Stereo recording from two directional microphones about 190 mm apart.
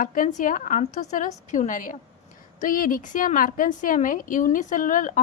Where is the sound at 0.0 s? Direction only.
45° left (ahead or behind).